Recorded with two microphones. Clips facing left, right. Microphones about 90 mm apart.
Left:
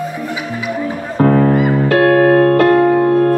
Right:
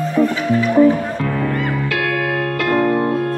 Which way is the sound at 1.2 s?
40° left (ahead or behind).